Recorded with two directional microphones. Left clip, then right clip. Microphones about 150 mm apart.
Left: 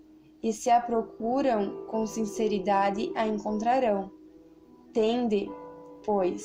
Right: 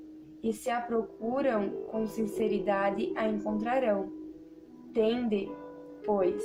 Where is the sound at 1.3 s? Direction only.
30° left (ahead or behind).